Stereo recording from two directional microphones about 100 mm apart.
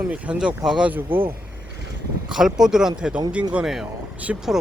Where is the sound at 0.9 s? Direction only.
20° right (ahead or behind).